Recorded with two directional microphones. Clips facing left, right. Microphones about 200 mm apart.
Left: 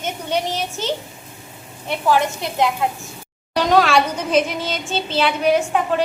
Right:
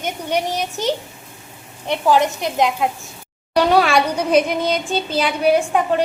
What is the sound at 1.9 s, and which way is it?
A child's voice, 15° right (ahead or behind).